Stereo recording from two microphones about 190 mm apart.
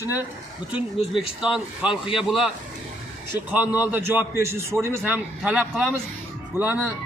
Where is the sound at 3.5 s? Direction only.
10° right (ahead or behind).